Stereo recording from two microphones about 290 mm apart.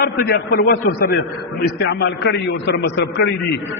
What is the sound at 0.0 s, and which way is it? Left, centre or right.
A man's voice, left.